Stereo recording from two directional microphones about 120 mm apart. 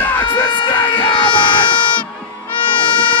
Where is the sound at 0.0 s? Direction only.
15° left (ahead or behind).